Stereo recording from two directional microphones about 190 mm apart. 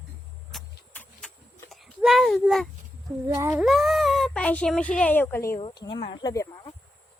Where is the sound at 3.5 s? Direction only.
Centre (ahead or behind); by 6.6 s 20° left (ahead or behind).